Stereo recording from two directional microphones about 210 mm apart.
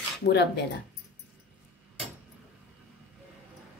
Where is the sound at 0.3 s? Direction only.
55° left (ahead or behind).